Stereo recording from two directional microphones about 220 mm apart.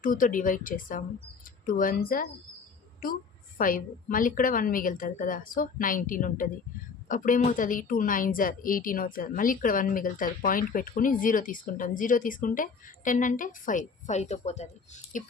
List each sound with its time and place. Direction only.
0.0 s a woman's voice: 35° left (ahead or behind)
3.6 s a woman's voice: 40° left (ahead or behind)